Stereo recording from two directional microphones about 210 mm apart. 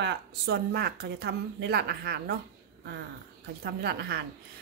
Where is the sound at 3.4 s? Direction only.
50° right (ahead or behind).